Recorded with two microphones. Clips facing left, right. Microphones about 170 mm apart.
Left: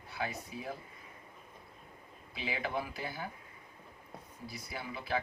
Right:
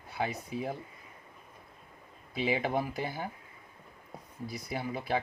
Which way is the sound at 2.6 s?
45° right (ahead or behind).